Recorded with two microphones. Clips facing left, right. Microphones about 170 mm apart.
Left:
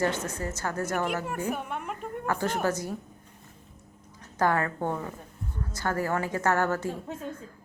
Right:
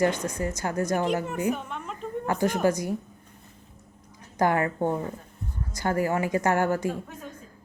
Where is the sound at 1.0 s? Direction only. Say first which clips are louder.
Right 4 dB; 10° left (ahead or behind).